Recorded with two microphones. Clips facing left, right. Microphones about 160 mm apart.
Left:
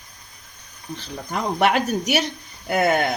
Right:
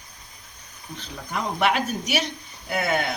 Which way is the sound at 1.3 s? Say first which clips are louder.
Left 3 dB; 40° left (ahead or behind).